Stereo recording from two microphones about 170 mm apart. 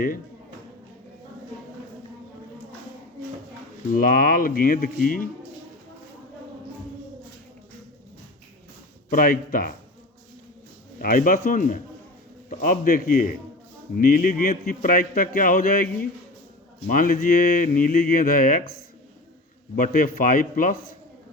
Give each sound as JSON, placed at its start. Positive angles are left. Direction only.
{"t": 3.9, "sound": "speech", "side_deg": 55}
{"t": 9.0, "sound": "speech", "side_deg": 55}
{"t": 11.0, "sound": "a man's voice", "side_deg": 55}
{"t": 16.9, "sound": "speech", "side_deg": 55}
{"t": 19.7, "sound": "speech", "side_deg": 55}